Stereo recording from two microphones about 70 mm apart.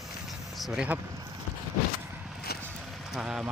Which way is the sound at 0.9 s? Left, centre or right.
Centre.